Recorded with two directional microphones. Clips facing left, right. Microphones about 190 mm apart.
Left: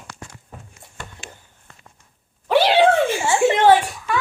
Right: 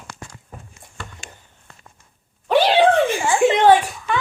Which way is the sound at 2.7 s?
15° right (ahead or behind).